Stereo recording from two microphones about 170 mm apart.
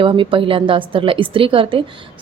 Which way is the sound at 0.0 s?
30° right (ahead or behind).